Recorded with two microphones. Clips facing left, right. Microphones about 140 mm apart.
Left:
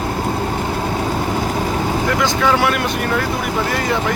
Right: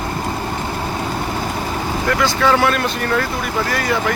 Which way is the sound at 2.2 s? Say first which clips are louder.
Right 2 dB; 10° left (ahead or behind).